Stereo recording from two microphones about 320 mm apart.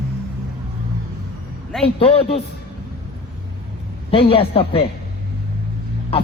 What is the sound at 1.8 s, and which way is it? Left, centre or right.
Speech, centre.